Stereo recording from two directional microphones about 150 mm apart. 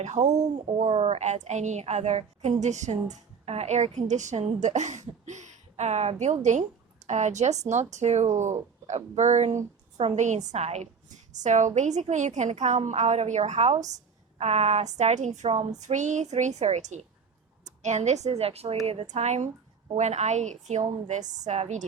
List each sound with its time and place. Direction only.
0.0 s speech: 50° right (ahead or behind)